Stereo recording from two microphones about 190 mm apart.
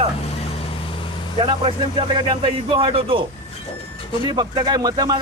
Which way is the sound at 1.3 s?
30° right (ahead or behind).